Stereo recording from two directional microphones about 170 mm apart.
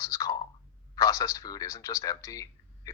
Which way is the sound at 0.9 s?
20° left (ahead or behind).